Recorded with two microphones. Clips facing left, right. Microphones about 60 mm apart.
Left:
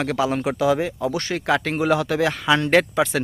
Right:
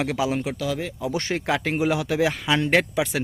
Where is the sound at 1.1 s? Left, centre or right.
Right.